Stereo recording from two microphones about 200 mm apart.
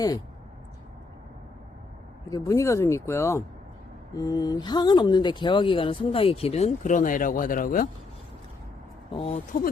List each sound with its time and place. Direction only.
2.3 s speech: 15° left (ahead or behind); by 7.9 s 45° left (ahead or behind)
9.1 s speech: 30° left (ahead or behind)